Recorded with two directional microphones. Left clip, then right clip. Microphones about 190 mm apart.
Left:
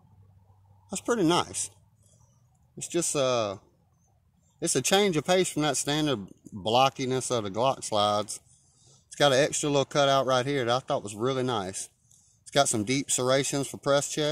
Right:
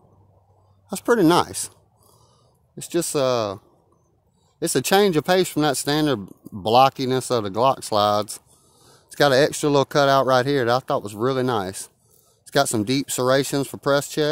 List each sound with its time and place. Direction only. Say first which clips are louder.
0.8 s speech: right 8 dB; 50° right (ahead or behind)
2.8 s speech: right 5 dB; 50° right (ahead or behind)